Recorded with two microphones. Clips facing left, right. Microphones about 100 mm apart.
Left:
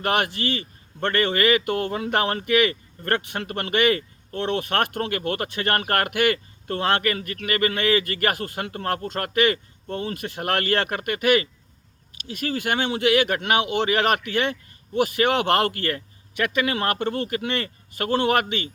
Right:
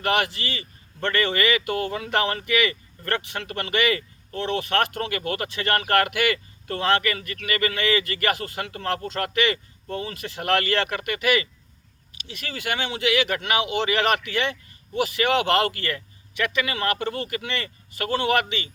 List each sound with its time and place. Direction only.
0.0 s speech: 45° left (ahead or behind)